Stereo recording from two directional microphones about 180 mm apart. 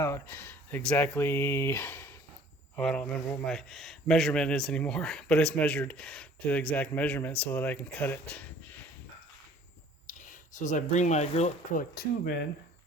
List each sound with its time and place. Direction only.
0.0 s speech: 15° left (ahead or behind)
10.1 s speech: 45° left (ahead or behind); by 12.5 s 65° left (ahead or behind)